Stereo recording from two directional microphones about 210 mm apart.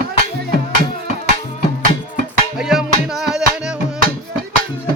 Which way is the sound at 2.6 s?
Centre (ahead or behind).